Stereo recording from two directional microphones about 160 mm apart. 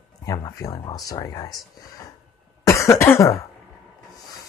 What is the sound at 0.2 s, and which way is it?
Speech, 20° left (ahead or behind).